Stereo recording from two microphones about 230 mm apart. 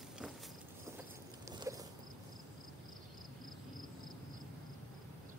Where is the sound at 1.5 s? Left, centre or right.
Centre.